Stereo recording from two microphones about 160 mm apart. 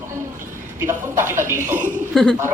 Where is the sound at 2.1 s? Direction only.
5° left (ahead or behind).